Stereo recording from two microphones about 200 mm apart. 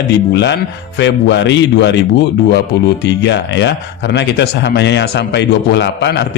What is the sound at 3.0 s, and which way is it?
A man's voice, 60° left (ahead or behind).